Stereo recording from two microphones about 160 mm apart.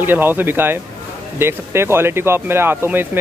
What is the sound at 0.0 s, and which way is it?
Speech, 10° right (ahead or behind).